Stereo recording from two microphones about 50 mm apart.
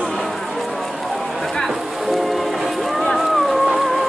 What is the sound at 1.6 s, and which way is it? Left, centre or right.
Music, centre.